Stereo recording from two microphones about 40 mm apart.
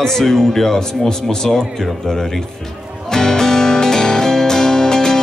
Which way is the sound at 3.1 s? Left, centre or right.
Centre.